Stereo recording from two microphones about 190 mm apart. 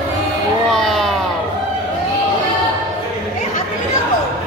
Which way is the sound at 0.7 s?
Centre (ahead or behind).